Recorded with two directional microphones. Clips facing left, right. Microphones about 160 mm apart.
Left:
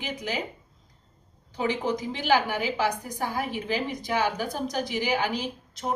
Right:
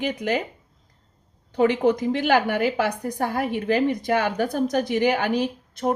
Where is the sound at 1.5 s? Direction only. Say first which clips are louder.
Right 8 dB; 60° right (ahead or behind).